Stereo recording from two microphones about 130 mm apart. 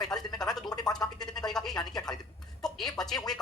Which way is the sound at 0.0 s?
30° left (ahead or behind).